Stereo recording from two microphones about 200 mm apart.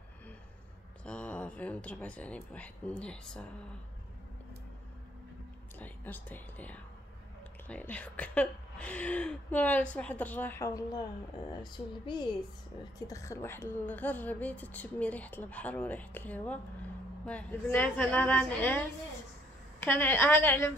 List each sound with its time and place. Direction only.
1.0 s speech: 5° left (ahead or behind)
5.8 s speech: 10° left (ahead or behind)